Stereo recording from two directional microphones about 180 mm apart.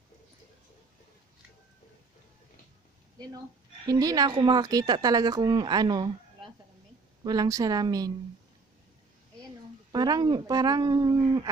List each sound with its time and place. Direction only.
3.8 s speech: 20° right (ahead or behind)
7.2 s speech: 20° right (ahead or behind)
9.9 s speech: 20° right (ahead or behind)